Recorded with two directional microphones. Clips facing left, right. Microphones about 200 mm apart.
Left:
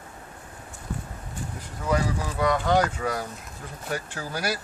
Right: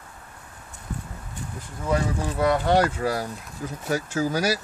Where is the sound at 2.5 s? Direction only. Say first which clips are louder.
Right 2 dB; 30° right (ahead or behind).